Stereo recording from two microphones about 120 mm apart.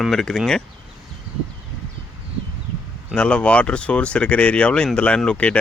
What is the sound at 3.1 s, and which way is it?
Speech, 10° left (ahead or behind).